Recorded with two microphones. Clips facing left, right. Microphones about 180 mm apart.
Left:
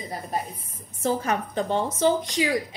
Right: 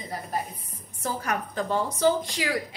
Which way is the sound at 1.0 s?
25° left (ahead or behind).